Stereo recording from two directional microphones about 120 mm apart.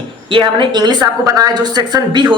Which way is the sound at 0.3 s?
45° right (ahead or behind).